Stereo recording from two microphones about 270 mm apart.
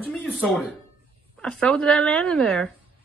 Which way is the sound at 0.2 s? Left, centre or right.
Centre.